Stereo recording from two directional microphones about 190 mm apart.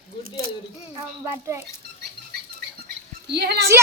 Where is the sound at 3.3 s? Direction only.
60° right (ahead or behind).